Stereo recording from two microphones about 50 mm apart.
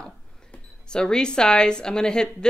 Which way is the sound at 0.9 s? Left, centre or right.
Centre.